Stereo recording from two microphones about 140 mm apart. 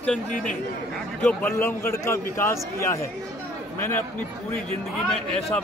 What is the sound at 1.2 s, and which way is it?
A man's voice, 10° left (ahead or behind).